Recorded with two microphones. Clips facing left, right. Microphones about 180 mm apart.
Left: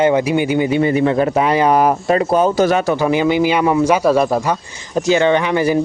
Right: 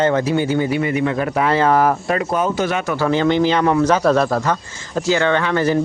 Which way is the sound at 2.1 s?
30° left (ahead or behind).